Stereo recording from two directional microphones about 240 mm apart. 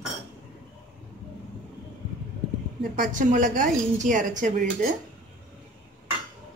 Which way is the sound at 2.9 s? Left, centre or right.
Right.